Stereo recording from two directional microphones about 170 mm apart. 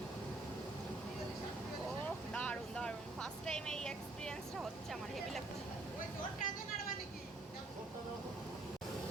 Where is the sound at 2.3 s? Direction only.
5° left (ahead or behind).